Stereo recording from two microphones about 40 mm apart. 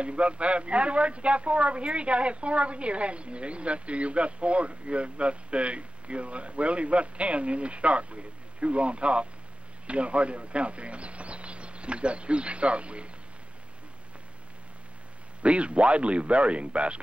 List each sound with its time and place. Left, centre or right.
0.0 s a man's voice: right
15.4 s a man's voice: right